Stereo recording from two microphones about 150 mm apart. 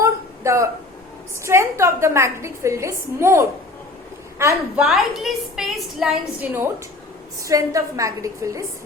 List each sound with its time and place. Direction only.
0.0 s a sound: 20° right (ahead or behind)
1.5 s a woman's voice: 20° right (ahead or behind)
4.8 s a woman's voice: centre (ahead or behind)
6.4 s a woman's voice: 15° right (ahead or behind)